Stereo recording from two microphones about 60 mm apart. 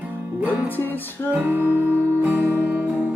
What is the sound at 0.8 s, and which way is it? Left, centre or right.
Music, left.